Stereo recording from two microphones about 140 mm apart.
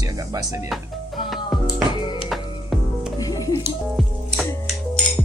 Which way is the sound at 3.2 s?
25° left (ahead or behind).